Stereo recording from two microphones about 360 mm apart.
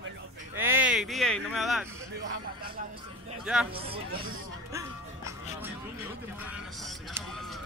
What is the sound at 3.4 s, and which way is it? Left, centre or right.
Speech, centre.